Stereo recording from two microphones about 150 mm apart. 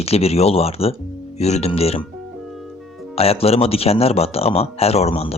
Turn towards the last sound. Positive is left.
turn(degrees=45)  # may be behind; listen again after turning